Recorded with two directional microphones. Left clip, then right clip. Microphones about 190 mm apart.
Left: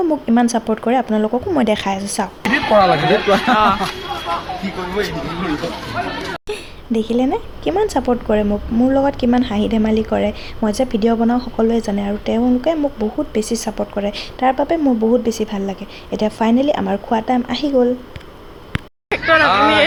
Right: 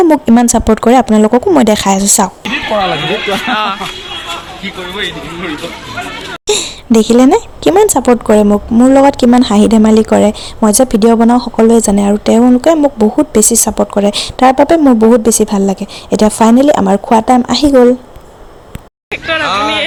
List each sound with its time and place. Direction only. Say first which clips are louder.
0.0 s speech: right 8 dB; 50° right (ahead or behind)
2.4 s speech: even; 5° left (ahead or behind)
6.5 s a woman's voice: right 16 dB; 60° right (ahead or behind)
19.1 s speech: left 1 dB; 5° left (ahead or behind)